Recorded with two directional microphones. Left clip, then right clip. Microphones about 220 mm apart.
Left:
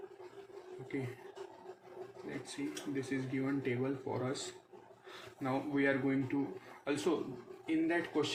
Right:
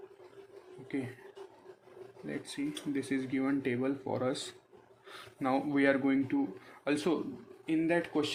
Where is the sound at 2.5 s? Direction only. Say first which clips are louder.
Right 4 dB; 50° right (ahead or behind).